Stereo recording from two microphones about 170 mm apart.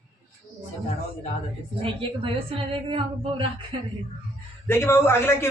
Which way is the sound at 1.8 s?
35° right (ahead or behind).